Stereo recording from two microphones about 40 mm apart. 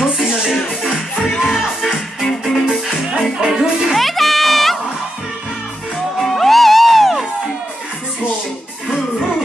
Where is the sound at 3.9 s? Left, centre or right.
Centre.